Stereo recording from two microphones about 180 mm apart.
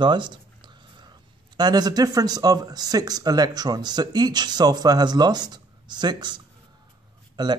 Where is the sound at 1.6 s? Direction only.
25° right (ahead or behind).